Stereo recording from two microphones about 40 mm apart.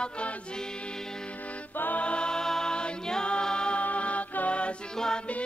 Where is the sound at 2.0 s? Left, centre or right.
Left.